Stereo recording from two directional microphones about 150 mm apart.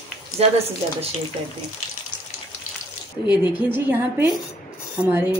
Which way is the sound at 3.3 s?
35° left (ahead or behind).